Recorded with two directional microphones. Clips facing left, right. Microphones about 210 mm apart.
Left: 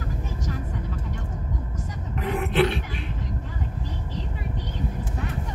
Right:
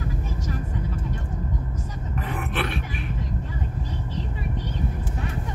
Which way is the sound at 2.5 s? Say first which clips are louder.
Left 8 dB; 20° left (ahead or behind).